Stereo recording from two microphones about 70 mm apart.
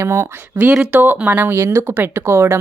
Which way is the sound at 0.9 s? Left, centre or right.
Right.